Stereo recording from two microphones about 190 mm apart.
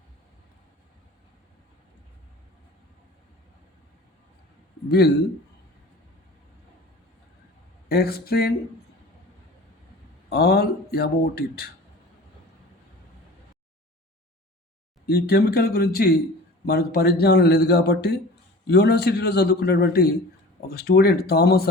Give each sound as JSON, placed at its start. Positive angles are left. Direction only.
{"t": 4.9, "sound": "a man's voice", "side_deg": 60}
{"t": 7.9, "sound": "a man's voice", "side_deg": 55}
{"t": 10.2, "sound": "a man's voice", "side_deg": 55}
{"t": 15.0, "sound": "a man's voice", "side_deg": 55}